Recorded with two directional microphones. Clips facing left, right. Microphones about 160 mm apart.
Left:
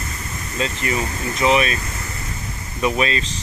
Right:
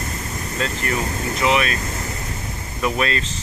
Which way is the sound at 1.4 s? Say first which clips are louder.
Left 2 dB; 30° left (ahead or behind).